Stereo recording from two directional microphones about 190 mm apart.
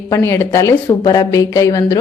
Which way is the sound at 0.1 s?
15° left (ahead or behind).